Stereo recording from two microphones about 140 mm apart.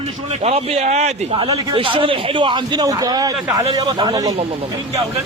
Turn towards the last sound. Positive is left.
turn(degrees=-25)  # may be behind; listen again after turning